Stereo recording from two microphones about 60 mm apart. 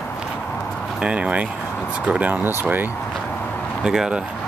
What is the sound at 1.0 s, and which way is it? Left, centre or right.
Speech, centre.